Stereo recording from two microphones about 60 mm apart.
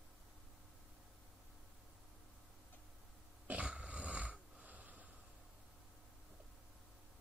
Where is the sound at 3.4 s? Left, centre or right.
Right.